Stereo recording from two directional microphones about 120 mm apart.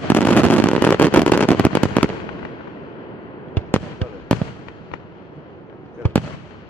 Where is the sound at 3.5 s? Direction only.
15° left (ahead or behind).